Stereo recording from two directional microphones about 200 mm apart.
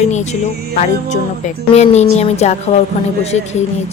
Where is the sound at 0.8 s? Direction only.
35° left (ahead or behind).